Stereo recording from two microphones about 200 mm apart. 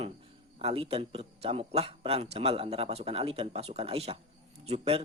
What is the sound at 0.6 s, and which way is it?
A man's voice, 30° right (ahead or behind).